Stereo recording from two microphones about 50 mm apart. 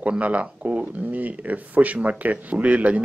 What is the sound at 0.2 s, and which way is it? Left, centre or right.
Speech, right.